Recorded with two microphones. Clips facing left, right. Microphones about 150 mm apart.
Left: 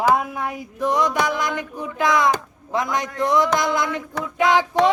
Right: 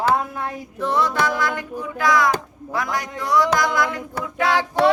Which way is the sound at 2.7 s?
20° left (ahead or behind).